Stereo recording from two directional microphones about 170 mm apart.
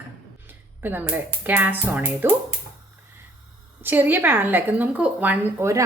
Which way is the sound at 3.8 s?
10° right (ahead or behind).